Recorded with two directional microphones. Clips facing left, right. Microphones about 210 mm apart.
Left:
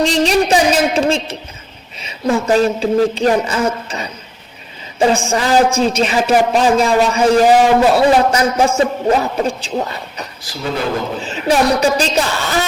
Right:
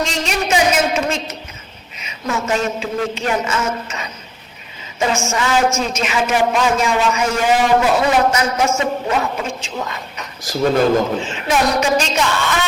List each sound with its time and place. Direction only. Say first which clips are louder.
0.0 s a woman's voice: left 8 dB; 35° left (ahead or behind)
10.5 s speech: right 7 dB; 45° right (ahead or behind)
11.2 s a man's voice: left 3 dB; 35° left (ahead or behind)